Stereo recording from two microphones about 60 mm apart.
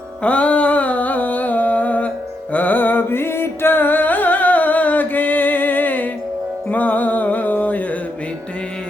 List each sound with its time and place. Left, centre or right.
0.2 s music: left